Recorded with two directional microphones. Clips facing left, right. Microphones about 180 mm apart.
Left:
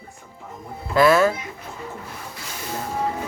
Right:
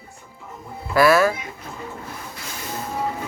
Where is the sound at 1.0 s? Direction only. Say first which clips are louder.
Even; 10° right (ahead or behind).